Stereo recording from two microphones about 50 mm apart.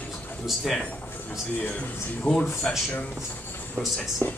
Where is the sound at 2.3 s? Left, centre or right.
Left.